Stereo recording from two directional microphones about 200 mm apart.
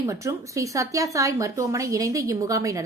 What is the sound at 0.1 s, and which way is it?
A woman's voice, 15° right (ahead or behind).